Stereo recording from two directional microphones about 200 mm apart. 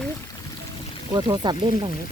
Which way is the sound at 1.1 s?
20° right (ahead or behind).